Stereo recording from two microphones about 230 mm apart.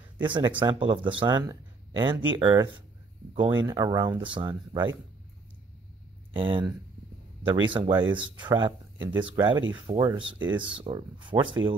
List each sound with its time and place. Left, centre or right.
0.2 s speech: centre
6.3 s speech: right